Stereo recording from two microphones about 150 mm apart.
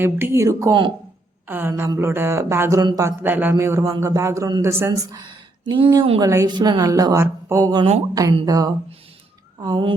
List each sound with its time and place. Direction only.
0.0 s a woman's voice: 15° right (ahead or behind)
3.2 s a woman's voice: 15° right (ahead or behind); by 9.9 s 30° right (ahead or behind)